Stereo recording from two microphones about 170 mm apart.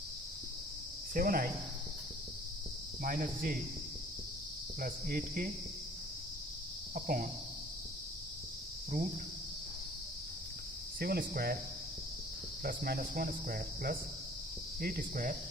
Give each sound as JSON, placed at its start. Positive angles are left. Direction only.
{"t": 1.1, "sound": "cricket", "side_deg": -55}
{"t": 3.0, "sound": "cricket", "side_deg": -55}
{"t": 4.8, "sound": "cricket", "side_deg": -60}
{"t": 6.9, "sound": "cricket", "side_deg": -55}
{"t": 11.0, "sound": "cricket", "side_deg": -65}
{"t": 12.6, "sound": "cricket", "side_deg": -65}